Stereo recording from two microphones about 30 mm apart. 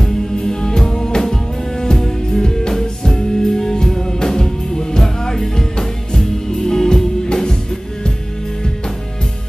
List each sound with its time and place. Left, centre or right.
0.4 s music: left